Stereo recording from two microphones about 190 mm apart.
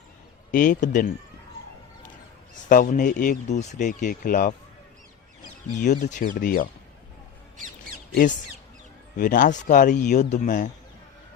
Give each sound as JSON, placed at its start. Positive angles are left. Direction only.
{"t": 0.5, "sound": "speech", "side_deg": 45}
{"t": 2.6, "sound": "speech", "side_deg": 45}
{"t": 5.8, "sound": "speech", "side_deg": 40}
{"t": 9.1, "sound": "speech", "side_deg": 45}